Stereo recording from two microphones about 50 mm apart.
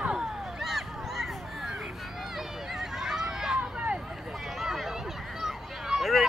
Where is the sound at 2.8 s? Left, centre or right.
Centre.